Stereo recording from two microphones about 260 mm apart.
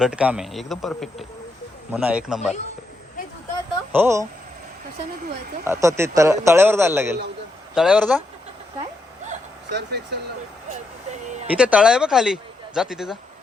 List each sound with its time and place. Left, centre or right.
0.0 s speech: centre
3.9 s a man's voice: centre
5.6 s a man's voice: centre
9.6 s speech: right
10.7 s speech: right
11.5 s speech: centre